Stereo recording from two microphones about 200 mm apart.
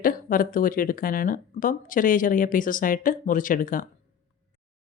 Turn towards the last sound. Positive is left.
turn(degrees=45)  # may be behind; listen again after turning